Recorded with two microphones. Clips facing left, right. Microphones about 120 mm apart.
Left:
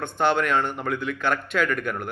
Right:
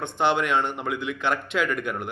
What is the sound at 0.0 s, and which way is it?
A man's voice, 20° right (ahead or behind).